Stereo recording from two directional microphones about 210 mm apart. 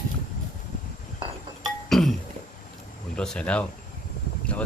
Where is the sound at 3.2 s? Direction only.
5° left (ahead or behind).